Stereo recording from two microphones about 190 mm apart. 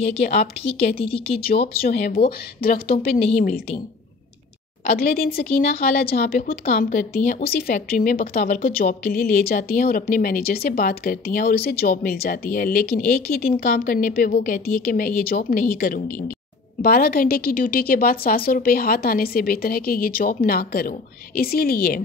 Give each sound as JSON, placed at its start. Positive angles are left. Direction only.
{"t": 0.0, "sound": "a woman's voice", "side_deg": 35}
{"t": 1.8, "sound": "speech", "side_deg": 55}
{"t": 4.9, "sound": "speech", "side_deg": 50}